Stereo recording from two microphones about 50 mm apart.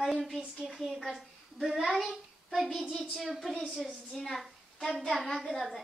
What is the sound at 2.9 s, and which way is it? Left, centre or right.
A woman's voice, centre.